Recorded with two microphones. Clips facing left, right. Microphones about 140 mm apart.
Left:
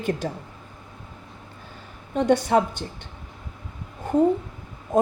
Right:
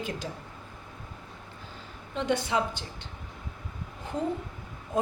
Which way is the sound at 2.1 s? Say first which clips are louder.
Left 8 dB; 50° left (ahead or behind).